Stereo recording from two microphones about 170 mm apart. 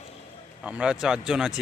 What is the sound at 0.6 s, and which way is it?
Speech, 5° right (ahead or behind).